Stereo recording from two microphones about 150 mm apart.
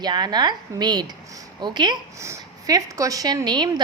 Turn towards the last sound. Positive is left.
turn(degrees=-30)  # may be behind; listen again after turning